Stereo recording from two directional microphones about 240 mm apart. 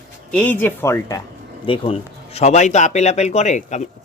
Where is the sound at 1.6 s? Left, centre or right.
Left.